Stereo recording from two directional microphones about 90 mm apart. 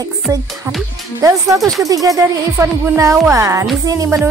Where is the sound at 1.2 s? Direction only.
35° right (ahead or behind).